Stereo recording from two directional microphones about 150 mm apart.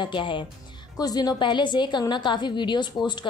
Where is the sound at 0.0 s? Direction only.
35° left (ahead or behind).